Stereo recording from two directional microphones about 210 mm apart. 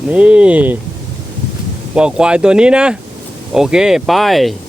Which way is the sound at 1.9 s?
5° right (ahead or behind).